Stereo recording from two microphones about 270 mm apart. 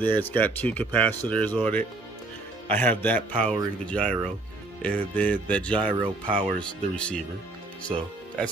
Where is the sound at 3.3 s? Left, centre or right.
Right.